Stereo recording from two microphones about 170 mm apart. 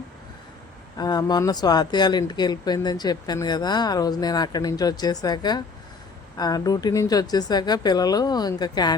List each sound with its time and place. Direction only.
0.9 s speech: 25° left (ahead or behind)